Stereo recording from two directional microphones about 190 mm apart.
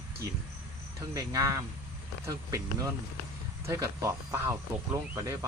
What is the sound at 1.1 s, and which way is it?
Speech, 15° right (ahead or behind).